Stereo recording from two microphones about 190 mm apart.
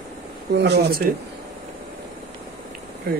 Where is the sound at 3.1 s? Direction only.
55° right (ahead or behind).